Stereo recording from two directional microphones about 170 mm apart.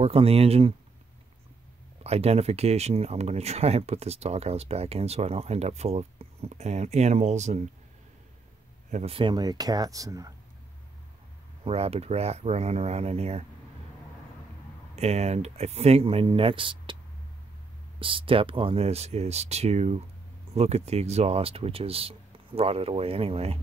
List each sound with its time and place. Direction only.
0.0 s speech: 35° right (ahead or behind)
2.0 s speech: 35° right (ahead or behind)
8.9 s speech: 35° right (ahead or behind)
11.6 s speech: 35° right (ahead or behind)
15.0 s speech: 40° right (ahead or behind)
17.9 s speech: 30° right (ahead or behind)